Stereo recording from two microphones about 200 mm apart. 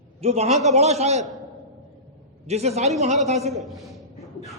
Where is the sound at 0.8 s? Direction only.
35° right (ahead or behind).